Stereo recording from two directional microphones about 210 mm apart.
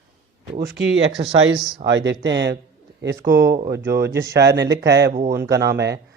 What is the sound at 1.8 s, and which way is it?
Speech, 60° right (ahead or behind).